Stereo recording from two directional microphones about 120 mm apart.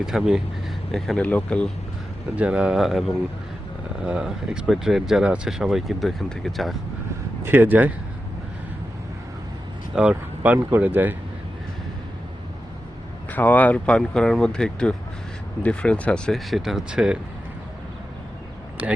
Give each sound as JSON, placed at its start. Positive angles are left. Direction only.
{"t": 0.0, "sound": "speech", "side_deg": -5}
{"t": 2.3, "sound": "speech", "side_deg": -10}
{"t": 4.0, "sound": "speech", "side_deg": -10}
{"t": 7.4, "sound": "speech", "side_deg": -15}
{"t": 9.9, "sound": "speech", "side_deg": -10}
{"t": 13.3, "sound": "speech", "side_deg": 15}
{"t": 18.8, "sound": "speech", "side_deg": -15}